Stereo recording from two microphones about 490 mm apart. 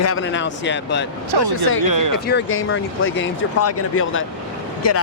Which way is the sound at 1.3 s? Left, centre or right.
Right.